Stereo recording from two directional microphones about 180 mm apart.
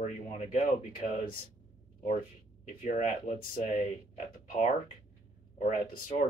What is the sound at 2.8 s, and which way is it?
Speech, 40° left (ahead or behind).